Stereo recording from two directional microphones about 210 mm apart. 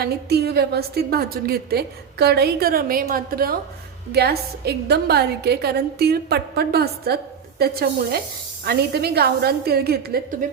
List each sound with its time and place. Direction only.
0.0 s a woman's voice: 50° right (ahead or behind)